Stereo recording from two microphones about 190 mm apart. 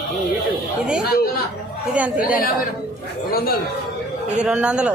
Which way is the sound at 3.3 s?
50° left (ahead or behind).